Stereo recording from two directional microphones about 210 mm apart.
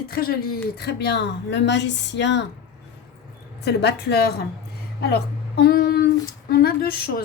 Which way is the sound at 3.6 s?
55° left (ahead or behind).